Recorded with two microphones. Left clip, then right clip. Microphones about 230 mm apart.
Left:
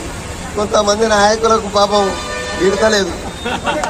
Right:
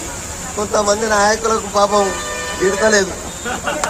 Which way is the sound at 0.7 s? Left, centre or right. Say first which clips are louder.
Left 3 dB; left.